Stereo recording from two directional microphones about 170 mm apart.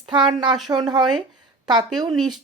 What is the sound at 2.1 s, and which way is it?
Speech, centre (ahead or behind).